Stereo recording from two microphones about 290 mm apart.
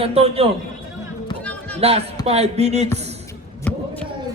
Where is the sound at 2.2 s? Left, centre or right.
Right.